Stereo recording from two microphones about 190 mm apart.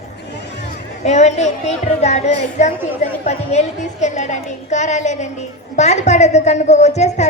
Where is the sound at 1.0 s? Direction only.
35° left (ahead or behind).